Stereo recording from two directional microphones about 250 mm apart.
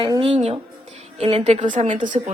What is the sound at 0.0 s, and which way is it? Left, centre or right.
A woman's voice, right.